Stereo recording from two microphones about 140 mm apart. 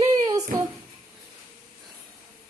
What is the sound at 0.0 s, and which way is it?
Music, 25° right (ahead or behind).